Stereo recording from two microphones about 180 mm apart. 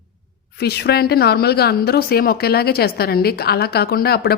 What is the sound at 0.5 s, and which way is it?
Speech, 65° left (ahead or behind).